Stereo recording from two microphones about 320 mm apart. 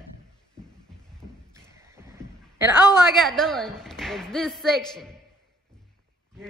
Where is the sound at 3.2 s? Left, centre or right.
Centre.